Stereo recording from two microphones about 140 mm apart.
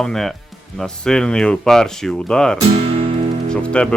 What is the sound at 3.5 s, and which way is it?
Speech, 5° left (ahead or behind).